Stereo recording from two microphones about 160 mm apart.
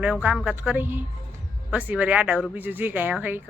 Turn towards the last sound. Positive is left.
turn(degrees=-10)  # may be behind; listen again after turning